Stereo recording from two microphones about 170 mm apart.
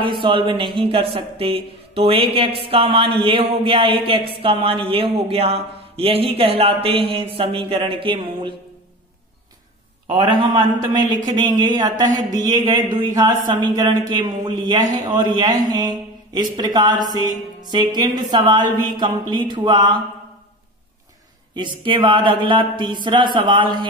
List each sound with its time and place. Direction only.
0.0 s speech: 30° right (ahead or behind)
10.1 s a man's voice: 25° right (ahead or behind)
21.5 s a man's voice: 30° right (ahead or behind)